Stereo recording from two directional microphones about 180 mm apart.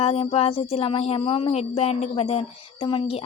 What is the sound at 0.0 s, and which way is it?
Speech, 35° left (ahead or behind).